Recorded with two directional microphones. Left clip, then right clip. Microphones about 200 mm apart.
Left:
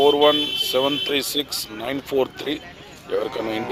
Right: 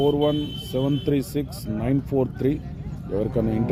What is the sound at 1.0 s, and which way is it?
Speech, 5° right (ahead or behind).